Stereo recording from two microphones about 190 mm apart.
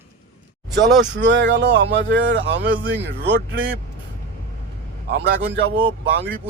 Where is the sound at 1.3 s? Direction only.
70° right (ahead or behind).